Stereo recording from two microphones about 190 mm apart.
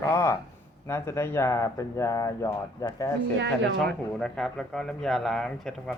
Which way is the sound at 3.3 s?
70° right (ahead or behind).